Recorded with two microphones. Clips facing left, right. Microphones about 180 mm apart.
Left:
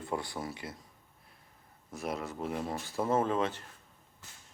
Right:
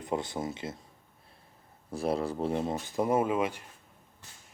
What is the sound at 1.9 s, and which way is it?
Speech, 30° right (ahead or behind).